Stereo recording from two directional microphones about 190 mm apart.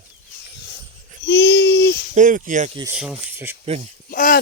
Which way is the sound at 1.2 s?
65° left (ahead or behind).